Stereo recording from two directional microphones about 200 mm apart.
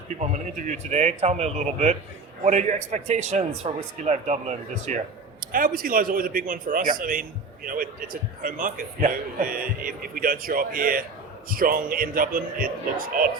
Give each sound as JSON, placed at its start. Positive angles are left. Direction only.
{"t": 0.2, "sound": "a man's voice", "side_deg": -35}